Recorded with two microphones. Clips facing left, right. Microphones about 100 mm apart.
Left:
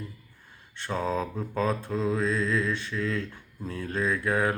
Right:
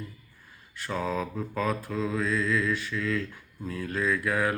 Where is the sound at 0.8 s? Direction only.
30° left (ahead or behind).